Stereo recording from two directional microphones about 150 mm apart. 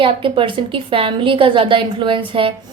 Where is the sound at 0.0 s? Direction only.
35° right (ahead or behind).